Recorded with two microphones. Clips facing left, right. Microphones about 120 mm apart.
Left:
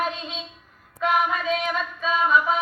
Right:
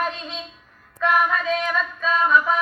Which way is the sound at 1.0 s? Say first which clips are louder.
Right 2 dB; 15° left (ahead or behind).